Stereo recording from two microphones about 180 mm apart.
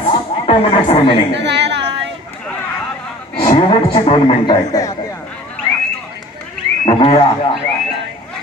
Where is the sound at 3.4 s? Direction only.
25° left (ahead or behind).